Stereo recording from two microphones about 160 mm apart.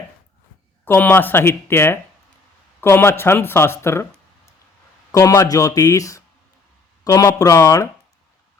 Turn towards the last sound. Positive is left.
turn(degrees=20)  # may be behind; listen again after turning